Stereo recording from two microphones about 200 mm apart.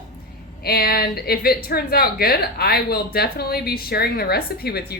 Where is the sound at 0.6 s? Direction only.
50° left (ahead or behind).